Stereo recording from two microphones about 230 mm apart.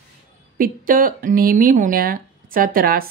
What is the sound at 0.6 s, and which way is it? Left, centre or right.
Speech, right.